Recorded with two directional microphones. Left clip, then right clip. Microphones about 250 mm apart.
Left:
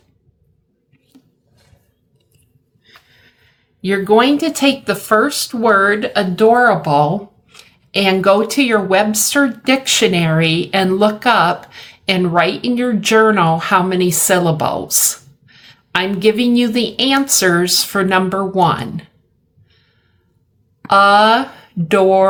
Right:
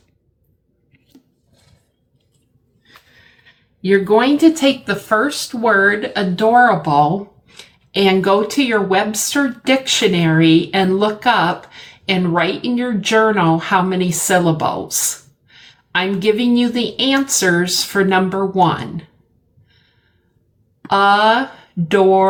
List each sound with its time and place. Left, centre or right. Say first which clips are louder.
3.8 s speech: left 1 dB; left
20.8 s speech: left 3 dB; left